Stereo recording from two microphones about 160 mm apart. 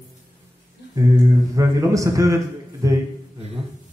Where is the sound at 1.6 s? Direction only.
20° right (ahead or behind).